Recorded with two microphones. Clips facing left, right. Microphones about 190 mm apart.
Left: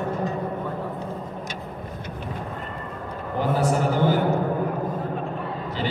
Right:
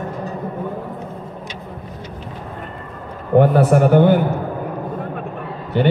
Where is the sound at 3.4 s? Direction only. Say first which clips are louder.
Right 9 dB; 60° right (ahead or behind).